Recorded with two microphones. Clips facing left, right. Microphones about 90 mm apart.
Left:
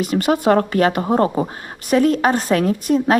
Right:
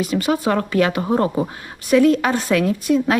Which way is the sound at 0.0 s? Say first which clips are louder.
Left 2 dB; 55° left (ahead or behind).